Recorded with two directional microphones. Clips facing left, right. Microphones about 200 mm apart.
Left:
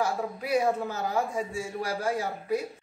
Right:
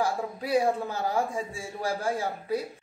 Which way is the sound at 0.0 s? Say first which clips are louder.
Even; 30° right (ahead or behind).